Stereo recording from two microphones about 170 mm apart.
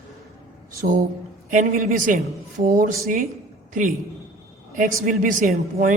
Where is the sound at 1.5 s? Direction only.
50° right (ahead or behind).